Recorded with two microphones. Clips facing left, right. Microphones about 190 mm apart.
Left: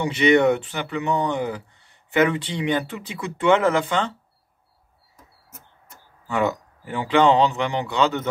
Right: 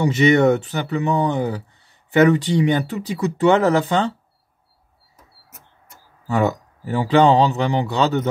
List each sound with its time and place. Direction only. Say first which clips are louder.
0.0 s speech: right 2 dB; 40° right (ahead or behind)
6.2 s speech: right 3 dB; 40° right (ahead or behind)